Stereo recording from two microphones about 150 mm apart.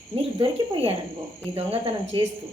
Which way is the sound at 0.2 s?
40° right (ahead or behind).